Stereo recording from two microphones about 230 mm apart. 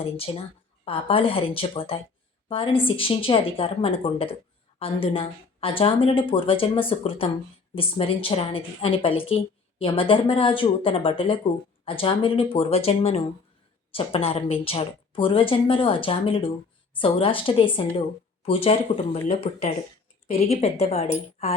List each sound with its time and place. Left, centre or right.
0.0 s a woman's voice: left